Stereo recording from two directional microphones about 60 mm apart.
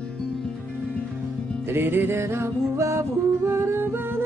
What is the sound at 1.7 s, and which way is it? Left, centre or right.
Music, right.